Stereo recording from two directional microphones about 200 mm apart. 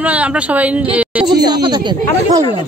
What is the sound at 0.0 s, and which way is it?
Speech, 5° right (ahead or behind).